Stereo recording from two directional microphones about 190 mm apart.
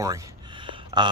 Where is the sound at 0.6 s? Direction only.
25° right (ahead or behind).